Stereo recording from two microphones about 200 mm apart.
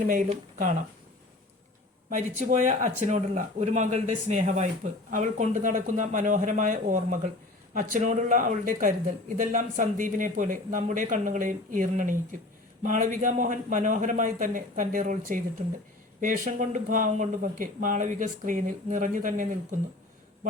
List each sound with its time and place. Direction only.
0.1 s speech: 40° right (ahead or behind)
2.0 s speech: 40° right (ahead or behind)